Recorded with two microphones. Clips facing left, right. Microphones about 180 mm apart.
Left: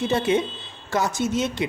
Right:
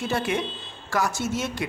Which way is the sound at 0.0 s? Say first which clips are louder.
Left 5 dB; 20° left (ahead or behind).